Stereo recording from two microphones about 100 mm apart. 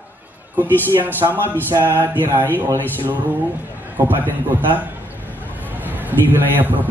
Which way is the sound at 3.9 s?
20° right (ahead or behind).